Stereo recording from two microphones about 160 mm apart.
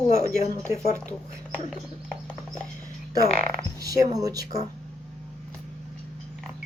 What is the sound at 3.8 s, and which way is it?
Speech, 20° right (ahead or behind).